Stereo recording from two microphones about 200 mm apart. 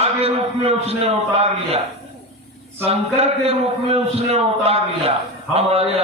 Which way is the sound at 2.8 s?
30° right (ahead or behind).